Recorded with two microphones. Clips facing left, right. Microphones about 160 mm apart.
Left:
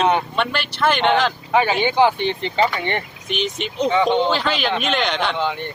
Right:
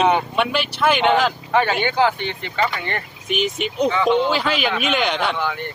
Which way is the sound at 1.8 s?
25° left (ahead or behind).